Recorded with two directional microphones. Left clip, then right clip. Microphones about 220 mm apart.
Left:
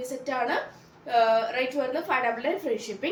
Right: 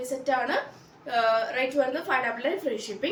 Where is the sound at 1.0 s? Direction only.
15° right (ahead or behind).